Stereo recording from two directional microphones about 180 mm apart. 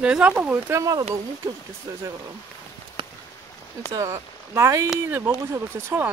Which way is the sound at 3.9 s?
15° right (ahead or behind).